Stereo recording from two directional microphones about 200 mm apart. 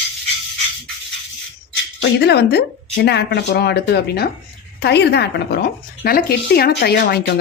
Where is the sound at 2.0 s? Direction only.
55° left (ahead or behind).